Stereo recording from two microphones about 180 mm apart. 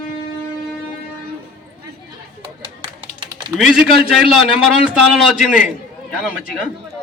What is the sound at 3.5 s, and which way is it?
A man's voice, centre (ahead or behind).